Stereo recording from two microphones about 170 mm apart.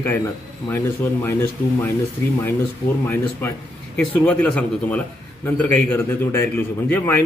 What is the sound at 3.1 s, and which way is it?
Speech, 15° left (ahead or behind).